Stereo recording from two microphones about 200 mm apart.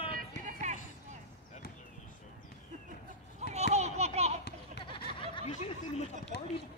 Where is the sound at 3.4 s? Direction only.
35° right (ahead or behind).